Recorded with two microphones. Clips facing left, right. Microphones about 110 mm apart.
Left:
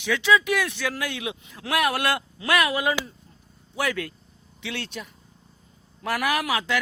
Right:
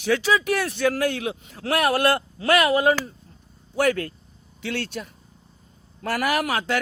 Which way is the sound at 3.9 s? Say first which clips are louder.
Right 6 dB; 40° right (ahead or behind).